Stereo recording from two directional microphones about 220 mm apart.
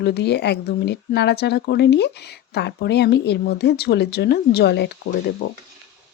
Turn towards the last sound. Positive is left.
turn(degrees=50)  # may be behind; listen again after turning